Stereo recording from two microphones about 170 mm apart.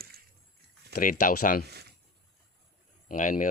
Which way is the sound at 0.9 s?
55° left (ahead or behind).